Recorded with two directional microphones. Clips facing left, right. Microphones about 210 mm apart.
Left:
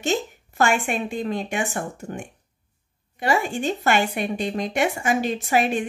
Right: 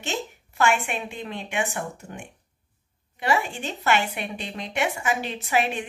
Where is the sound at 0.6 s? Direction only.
40° left (ahead or behind).